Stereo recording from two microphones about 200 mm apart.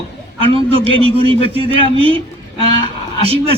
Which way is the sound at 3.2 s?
30° right (ahead or behind).